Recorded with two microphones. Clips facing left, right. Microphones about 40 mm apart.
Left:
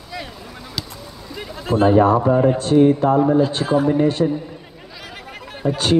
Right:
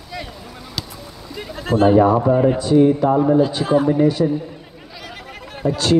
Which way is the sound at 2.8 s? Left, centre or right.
Left.